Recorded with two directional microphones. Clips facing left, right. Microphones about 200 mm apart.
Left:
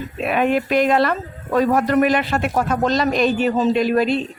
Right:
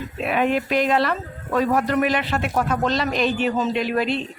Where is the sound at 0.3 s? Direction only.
50° left (ahead or behind).